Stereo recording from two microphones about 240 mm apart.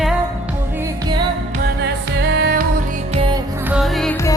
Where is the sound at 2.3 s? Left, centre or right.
Right.